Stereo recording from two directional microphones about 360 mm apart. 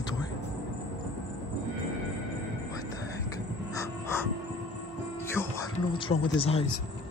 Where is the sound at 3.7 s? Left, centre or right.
Centre.